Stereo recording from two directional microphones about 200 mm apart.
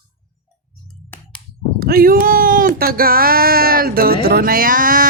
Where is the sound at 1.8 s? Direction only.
50° right (ahead or behind).